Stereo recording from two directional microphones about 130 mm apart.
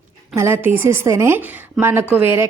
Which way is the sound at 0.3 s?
20° right (ahead or behind).